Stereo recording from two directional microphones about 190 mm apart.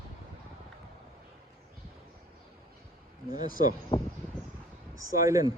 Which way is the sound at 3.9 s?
25° left (ahead or behind).